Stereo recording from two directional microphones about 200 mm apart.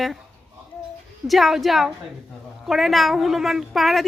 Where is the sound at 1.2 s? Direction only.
Centre (ahead or behind).